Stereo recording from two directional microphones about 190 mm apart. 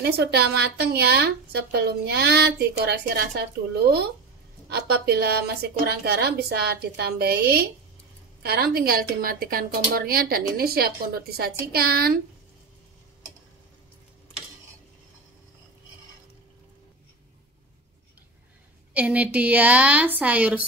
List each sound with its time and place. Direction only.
0.0 s speech: 55° right (ahead or behind)
18.9 s a woman's voice: 5° right (ahead or behind)